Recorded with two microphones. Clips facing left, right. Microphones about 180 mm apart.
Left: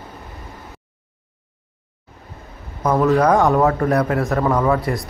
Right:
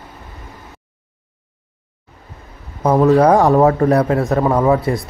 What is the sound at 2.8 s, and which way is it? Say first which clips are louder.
A man's voice: right 4 dB; 30° right (ahead or behind).